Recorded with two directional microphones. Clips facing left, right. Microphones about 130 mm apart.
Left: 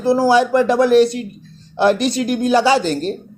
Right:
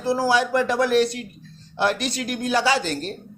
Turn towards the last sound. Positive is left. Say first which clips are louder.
# left 7 dB
turn(degrees=25)  # may be behind; listen again after turning